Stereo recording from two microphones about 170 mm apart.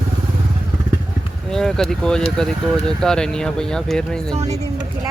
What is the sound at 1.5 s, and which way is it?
Speech, centre (ahead or behind).